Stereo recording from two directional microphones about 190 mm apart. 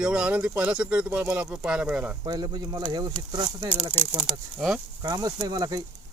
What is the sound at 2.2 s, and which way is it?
Speech, 20° right (ahead or behind).